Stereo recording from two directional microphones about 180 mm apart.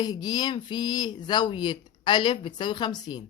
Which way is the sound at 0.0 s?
20° left (ahead or behind).